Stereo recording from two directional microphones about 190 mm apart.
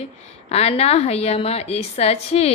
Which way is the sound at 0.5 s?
35° left (ahead or behind).